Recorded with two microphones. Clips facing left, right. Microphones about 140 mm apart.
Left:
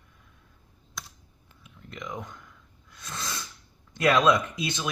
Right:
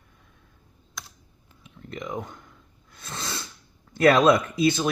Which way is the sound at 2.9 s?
30° right (ahead or behind).